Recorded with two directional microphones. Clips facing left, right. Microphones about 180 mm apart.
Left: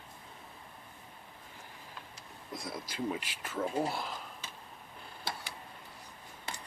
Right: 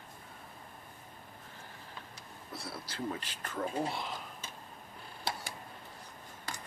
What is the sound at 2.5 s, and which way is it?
Speech, 15° left (ahead or behind).